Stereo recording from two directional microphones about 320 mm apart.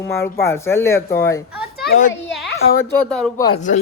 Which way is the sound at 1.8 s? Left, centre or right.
Left.